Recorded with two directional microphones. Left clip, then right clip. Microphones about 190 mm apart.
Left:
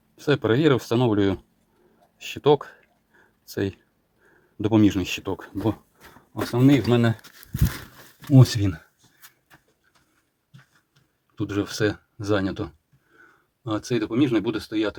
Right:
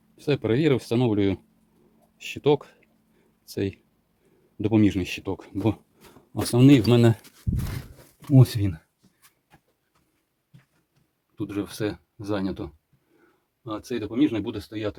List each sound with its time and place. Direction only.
0.2 s speech: 10° right (ahead or behind)
6.3 s speech: 55° right (ahead or behind)
8.3 s speech: centre (ahead or behind)
11.3 s speech: centre (ahead or behind)
13.7 s speech: 10° left (ahead or behind)